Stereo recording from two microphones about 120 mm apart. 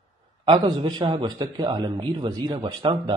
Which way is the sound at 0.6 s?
35° right (ahead or behind).